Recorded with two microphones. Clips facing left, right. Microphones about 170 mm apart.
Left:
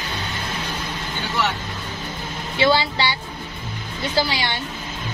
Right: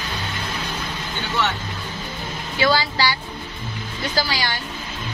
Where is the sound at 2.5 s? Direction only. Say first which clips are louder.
Left 1 dB; 25° left (ahead or behind).